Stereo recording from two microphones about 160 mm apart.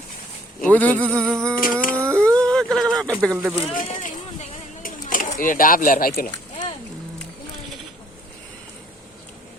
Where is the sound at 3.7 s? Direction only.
55° left (ahead or behind).